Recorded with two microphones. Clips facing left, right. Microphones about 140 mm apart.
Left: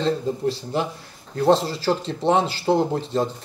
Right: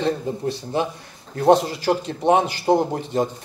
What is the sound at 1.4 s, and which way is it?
Speech, 15° right (ahead or behind).